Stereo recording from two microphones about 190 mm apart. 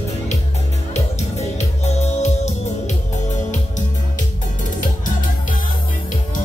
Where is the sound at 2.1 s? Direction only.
35° left (ahead or behind).